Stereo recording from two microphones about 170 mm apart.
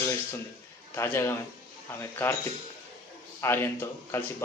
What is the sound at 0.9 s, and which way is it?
Speech, 15° left (ahead or behind).